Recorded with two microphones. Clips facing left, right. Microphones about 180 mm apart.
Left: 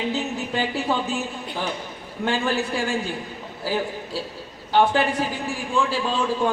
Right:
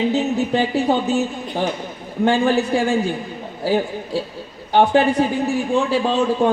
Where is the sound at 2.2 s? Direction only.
45° right (ahead or behind).